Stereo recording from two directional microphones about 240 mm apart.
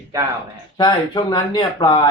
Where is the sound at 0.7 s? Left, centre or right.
Centre.